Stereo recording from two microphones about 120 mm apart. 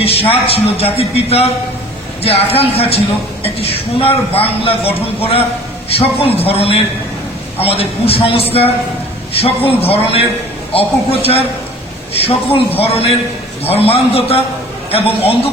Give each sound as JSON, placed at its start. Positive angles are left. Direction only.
{"t": 0.0, "sound": "a man's voice", "side_deg": 55}
{"t": 6.0, "sound": "a man's voice", "side_deg": 55}